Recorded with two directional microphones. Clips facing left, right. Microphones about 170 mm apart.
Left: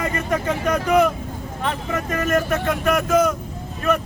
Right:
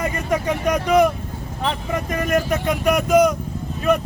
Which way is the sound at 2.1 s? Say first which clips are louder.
Even; 15° right (ahead or behind).